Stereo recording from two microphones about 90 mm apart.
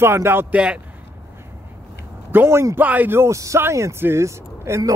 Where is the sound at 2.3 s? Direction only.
25° right (ahead or behind).